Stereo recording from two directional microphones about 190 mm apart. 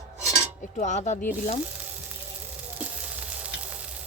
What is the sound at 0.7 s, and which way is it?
Speech, 40° left (ahead or behind).